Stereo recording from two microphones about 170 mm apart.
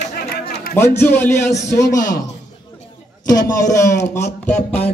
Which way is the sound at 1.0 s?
15° left (ahead or behind).